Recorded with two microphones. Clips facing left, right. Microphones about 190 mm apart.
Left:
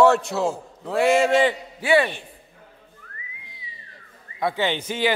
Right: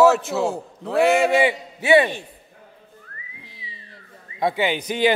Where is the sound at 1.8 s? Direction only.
20° right (ahead or behind).